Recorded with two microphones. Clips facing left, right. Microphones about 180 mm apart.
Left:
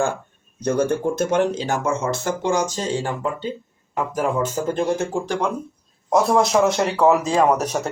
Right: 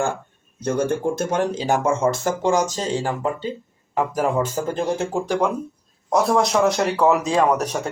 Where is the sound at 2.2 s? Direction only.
40° right (ahead or behind).